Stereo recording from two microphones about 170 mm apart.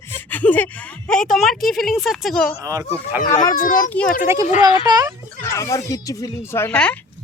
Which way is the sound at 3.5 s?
50° left (ahead or behind).